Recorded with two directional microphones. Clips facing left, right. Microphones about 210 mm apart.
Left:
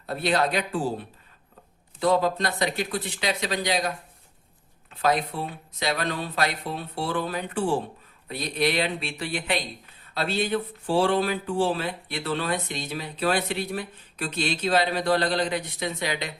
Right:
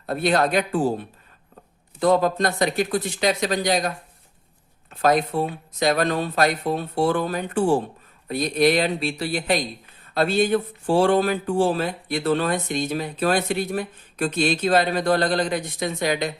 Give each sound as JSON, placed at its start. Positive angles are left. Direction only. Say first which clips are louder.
{"t": 0.0, "sound": "speech", "louder": "right 4 dB", "side_deg": -50}
{"t": 2.0, "sound": "speech", "louder": "right 4 dB", "side_deg": -50}